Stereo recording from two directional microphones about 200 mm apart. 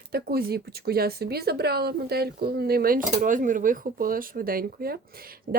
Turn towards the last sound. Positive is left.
turn(degrees=-50)  # may be behind; listen again after turning